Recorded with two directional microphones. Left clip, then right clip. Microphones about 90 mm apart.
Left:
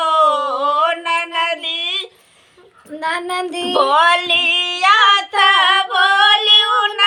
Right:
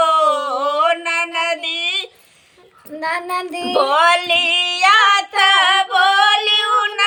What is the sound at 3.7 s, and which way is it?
Female singing, 25° right (ahead or behind).